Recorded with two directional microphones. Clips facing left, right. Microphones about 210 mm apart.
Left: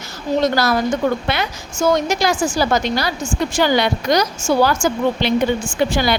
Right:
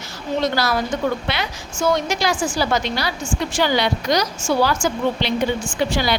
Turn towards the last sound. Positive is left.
turn(degrees=50)  # may be behind; listen again after turning